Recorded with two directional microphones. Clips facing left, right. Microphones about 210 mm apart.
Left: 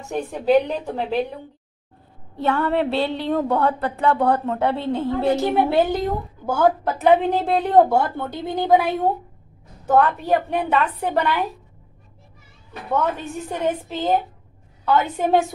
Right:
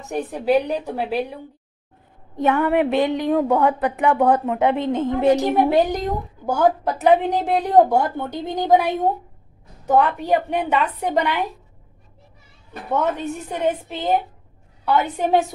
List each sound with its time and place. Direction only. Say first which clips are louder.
0.1 s a woman's voice: left 1 dB; 10° right (ahead or behind)
13.5 s a woman's voice: even; 15° right (ahead or behind)